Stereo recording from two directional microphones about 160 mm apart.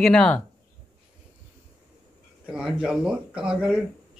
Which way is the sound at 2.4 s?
5° right (ahead or behind).